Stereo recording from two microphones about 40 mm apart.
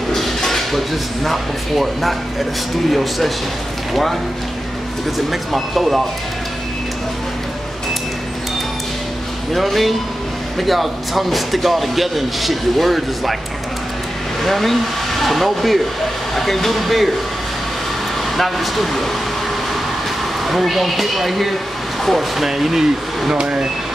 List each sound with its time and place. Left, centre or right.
0.1 s speech: centre
9.5 s speech: centre
14.4 s speech: centre
18.3 s speech: centre
20.4 s speech: centre
22.5 s speech: centre
23.3 s speech: right